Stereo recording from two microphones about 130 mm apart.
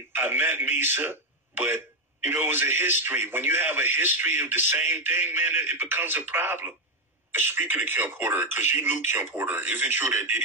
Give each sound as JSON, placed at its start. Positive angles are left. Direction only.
{"t": 0.1, "sound": "a man's voice", "side_deg": -15}